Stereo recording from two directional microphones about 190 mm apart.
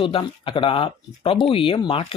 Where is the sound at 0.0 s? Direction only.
30° left (ahead or behind).